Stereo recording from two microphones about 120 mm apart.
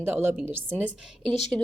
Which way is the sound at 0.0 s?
20° right (ahead or behind).